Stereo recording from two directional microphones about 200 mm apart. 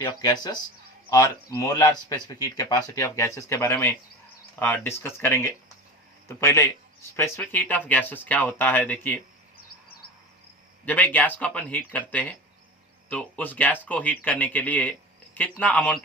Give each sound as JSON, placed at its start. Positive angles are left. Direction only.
{"t": 0.0, "sound": "speech", "side_deg": 20}
{"t": 10.8, "sound": "speech", "side_deg": 10}